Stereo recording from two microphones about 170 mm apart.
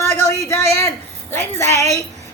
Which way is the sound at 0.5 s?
15° left (ahead or behind).